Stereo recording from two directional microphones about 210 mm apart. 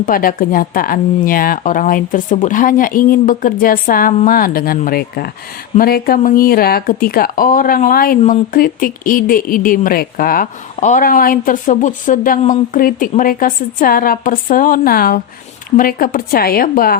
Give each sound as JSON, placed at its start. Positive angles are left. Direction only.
{"t": 0.0, "sound": "a woman's voice", "side_deg": 40}